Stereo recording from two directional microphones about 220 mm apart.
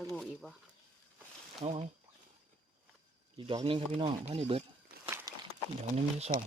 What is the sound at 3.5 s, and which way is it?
Speech, 25° right (ahead or behind).